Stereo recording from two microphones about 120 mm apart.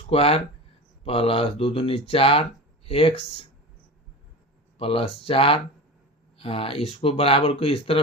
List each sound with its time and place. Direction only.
0.0 s speech: 55° left (ahead or behind)
4.8 s speech: 50° left (ahead or behind)